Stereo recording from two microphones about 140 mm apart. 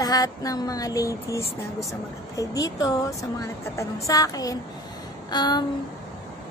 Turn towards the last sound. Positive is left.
turn(degrees=30)  # may be behind; listen again after turning